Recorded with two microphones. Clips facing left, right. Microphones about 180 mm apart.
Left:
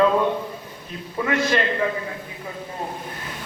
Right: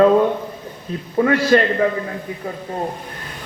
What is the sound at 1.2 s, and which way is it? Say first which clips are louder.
Speech: right 7 dB; 40° right (ahead or behind).